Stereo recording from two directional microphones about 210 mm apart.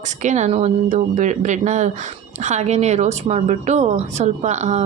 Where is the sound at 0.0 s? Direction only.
35° right (ahead or behind).